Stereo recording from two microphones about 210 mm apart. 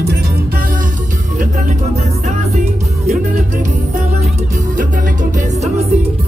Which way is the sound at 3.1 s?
40° right (ahead or behind).